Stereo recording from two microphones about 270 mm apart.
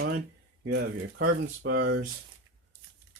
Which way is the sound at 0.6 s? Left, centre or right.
Right.